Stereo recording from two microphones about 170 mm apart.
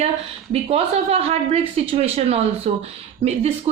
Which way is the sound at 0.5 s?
35° right (ahead or behind).